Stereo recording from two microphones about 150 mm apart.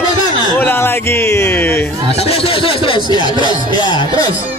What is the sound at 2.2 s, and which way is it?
Speech, 40° left (ahead or behind).